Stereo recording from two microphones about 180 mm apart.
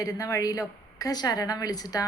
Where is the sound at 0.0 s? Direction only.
20° left (ahead or behind).